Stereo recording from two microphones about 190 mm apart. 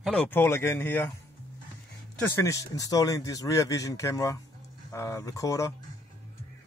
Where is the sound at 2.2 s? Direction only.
15° left (ahead or behind).